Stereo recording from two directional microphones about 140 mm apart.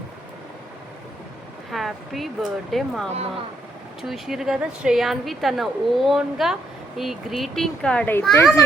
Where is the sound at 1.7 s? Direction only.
Centre (ahead or behind).